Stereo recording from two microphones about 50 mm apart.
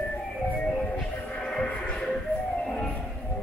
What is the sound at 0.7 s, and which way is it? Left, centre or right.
Music, left.